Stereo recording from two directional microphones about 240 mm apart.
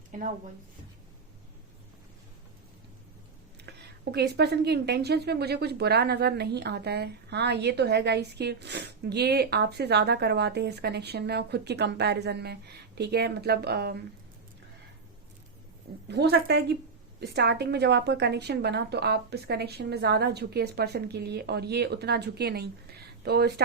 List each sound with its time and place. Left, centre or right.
0.1 s a woman's voice: right
3.7 s a woman's voice: right
16.0 s a woman's voice: right